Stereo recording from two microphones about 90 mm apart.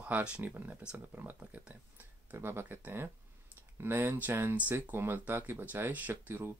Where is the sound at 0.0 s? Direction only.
10° right (ahead or behind).